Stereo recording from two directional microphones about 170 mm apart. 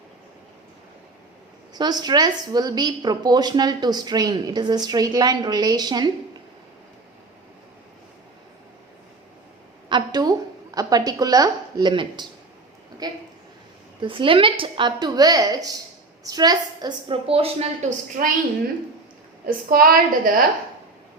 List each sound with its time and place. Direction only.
1.7 s a woman's voice: 25° right (ahead or behind)
9.9 s a woman's voice: 25° right (ahead or behind)
18.2 s a woman's voice: 55° right (ahead or behind)
19.5 s a woman's voice: 60° right (ahead or behind)